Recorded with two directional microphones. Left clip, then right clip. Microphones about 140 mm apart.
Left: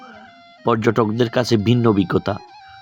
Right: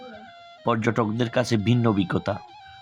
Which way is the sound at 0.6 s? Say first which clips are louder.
Left 6 dB; 35° left (ahead or behind).